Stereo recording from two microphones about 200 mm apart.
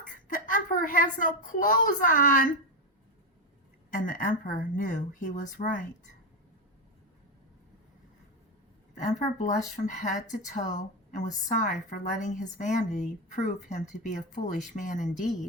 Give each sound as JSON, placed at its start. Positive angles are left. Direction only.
{"t": 0.0, "sound": "a woman's voice", "side_deg": 40}
{"t": 3.9, "sound": "a woman's voice", "side_deg": 40}
{"t": 9.0, "sound": "a woman's voice", "side_deg": 40}